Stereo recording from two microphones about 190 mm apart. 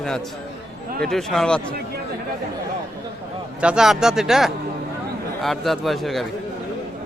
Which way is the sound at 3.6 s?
5° right (ahead or behind).